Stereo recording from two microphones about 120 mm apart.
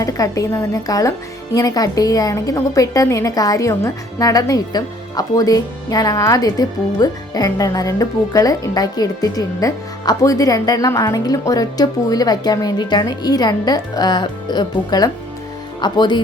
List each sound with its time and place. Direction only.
0.0 s a woman's voice: 30° left (ahead or behind)